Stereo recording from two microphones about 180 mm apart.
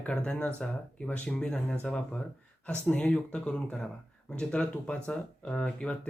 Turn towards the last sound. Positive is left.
turn(degrees=5)  # may be behind; listen again after turning